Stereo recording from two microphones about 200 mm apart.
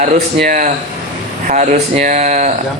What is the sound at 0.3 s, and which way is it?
A man's voice, 40° right (ahead or behind).